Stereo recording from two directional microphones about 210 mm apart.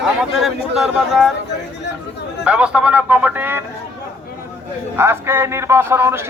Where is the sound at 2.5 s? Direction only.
5° right (ahead or behind).